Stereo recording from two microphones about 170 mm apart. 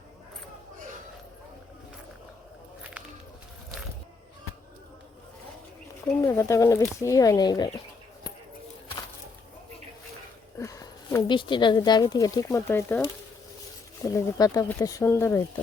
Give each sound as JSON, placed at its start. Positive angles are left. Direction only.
{"t": 6.2, "sound": "speech", "side_deg": 15}
{"t": 10.6, "sound": "speech", "side_deg": 20}